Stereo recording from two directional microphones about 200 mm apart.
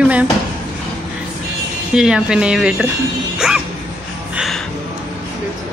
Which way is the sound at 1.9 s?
5° right (ahead or behind).